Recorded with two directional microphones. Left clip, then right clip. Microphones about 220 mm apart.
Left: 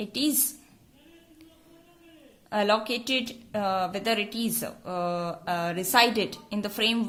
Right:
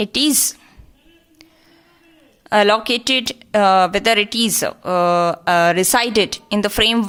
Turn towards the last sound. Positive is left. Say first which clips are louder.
# right 11 dB
turn(degrees=-30)  # may be behind; listen again after turning